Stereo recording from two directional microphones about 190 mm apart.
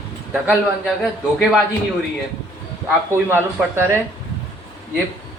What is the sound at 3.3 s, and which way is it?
Speech, 10° right (ahead or behind).